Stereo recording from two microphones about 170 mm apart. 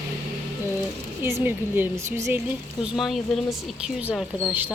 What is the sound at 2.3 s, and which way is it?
Speech, 5° right (ahead or behind).